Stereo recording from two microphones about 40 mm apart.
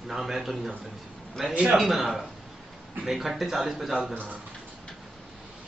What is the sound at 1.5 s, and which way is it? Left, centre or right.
Speech, right.